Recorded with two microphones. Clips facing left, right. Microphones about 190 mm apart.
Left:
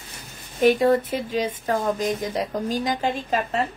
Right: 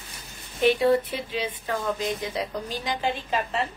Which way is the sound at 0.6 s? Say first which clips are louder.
Left 3 dB; 45° left (ahead or behind).